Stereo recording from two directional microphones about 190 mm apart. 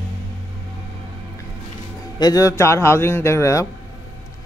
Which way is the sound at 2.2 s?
20° left (ahead or behind).